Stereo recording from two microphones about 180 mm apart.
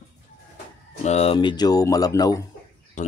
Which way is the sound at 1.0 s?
35° left (ahead or behind).